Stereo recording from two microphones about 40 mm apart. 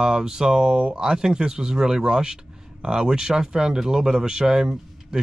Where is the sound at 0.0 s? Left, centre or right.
Centre.